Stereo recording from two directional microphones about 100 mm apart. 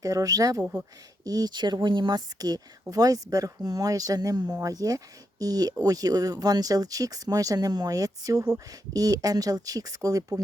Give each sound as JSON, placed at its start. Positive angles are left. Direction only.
{"t": 0.0, "sound": "speech", "side_deg": -35}
{"t": 0.6, "sound": "speech", "side_deg": -15}
{"t": 1.2, "sound": "speech", "side_deg": -40}